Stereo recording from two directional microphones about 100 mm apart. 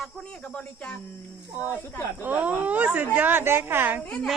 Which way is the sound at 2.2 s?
15° right (ahead or behind).